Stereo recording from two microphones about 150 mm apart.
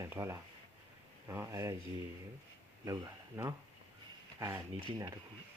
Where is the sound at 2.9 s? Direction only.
20° right (ahead or behind).